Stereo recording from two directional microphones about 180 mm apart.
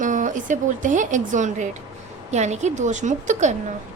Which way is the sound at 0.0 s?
45° right (ahead or behind).